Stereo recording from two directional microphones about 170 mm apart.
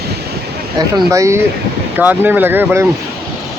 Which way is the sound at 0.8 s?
20° right (ahead or behind).